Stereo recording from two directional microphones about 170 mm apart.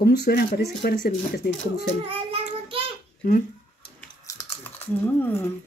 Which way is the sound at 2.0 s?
35° right (ahead or behind).